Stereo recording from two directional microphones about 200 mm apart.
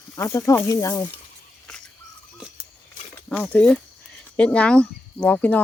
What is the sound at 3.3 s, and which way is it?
Speech, 10° left (ahead or behind).